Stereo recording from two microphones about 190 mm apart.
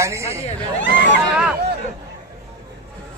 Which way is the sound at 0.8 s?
70° left (ahead or behind).